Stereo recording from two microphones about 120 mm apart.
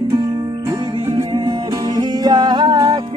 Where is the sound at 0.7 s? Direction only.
35° right (ahead or behind).